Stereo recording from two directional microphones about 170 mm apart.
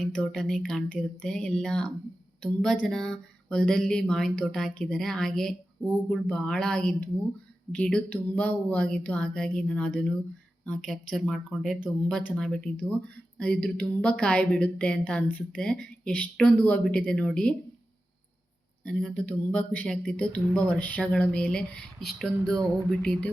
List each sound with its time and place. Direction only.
0.0 s a woman's voice: 5° left (ahead or behind)
18.9 s speech: 5° left (ahead or behind)